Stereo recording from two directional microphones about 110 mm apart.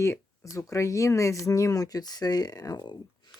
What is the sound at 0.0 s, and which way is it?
Speech, 25° left (ahead or behind).